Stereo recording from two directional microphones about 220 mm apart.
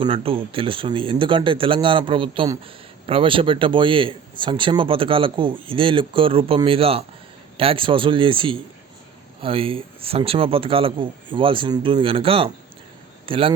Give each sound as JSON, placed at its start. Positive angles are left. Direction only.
{"t": 0.0, "sound": "speech", "side_deg": -25}